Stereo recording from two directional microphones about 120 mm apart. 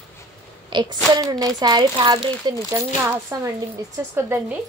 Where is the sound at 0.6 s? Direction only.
40° right (ahead or behind).